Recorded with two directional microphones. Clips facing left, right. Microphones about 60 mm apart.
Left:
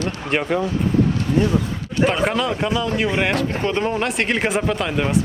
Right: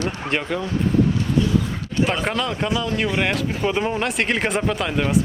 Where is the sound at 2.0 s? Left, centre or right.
Centre.